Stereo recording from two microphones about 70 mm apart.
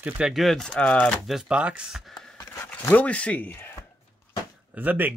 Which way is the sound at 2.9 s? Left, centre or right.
Left.